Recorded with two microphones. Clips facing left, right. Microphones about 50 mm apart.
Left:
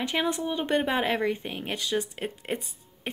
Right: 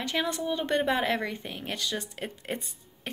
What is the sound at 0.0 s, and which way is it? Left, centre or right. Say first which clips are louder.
Speech: left 2 dB; centre.